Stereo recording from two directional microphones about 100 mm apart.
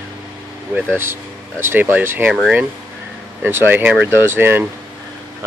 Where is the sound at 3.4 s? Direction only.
20° right (ahead or behind).